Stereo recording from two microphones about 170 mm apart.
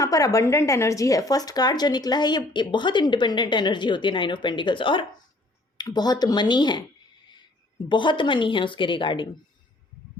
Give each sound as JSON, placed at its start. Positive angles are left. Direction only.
{"t": 0.0, "sound": "speech", "side_deg": 20}
{"t": 7.9, "sound": "speech", "side_deg": 30}